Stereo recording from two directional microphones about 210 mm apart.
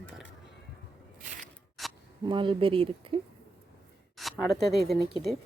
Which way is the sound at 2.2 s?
25° right (ahead or behind).